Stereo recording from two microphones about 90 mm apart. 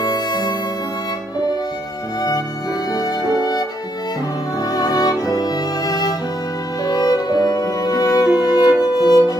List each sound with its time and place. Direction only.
0.0 s music: 50° left (ahead or behind)
2.9 s music: 45° left (ahead or behind)
4.7 s music: 45° left (ahead or behind)